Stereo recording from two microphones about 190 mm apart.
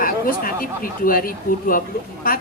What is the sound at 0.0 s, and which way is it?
A woman's voice, 45° left (ahead or behind).